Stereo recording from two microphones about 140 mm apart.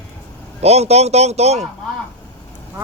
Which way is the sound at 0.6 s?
50° right (ahead or behind).